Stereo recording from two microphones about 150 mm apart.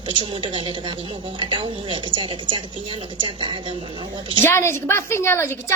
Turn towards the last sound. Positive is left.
turn(degrees=15)  # may be behind; listen again after turning